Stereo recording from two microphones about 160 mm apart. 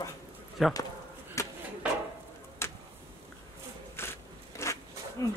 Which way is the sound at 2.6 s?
15° left (ahead or behind).